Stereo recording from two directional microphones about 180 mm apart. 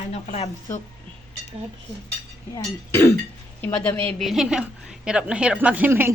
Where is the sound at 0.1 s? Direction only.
35° left (ahead or behind).